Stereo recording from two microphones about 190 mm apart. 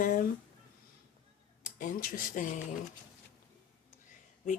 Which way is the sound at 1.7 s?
45° left (ahead or behind).